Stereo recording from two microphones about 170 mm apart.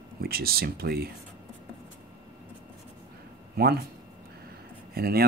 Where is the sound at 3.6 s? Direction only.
65° right (ahead or behind).